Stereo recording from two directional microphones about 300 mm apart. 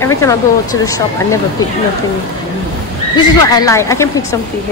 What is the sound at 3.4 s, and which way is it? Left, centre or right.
Speech, centre.